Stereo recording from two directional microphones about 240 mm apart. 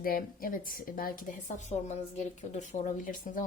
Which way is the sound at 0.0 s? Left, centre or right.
Left.